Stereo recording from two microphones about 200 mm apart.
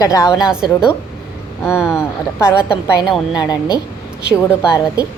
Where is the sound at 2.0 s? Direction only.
10° left (ahead or behind).